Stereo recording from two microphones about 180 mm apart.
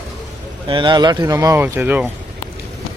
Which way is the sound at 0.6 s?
25° right (ahead or behind).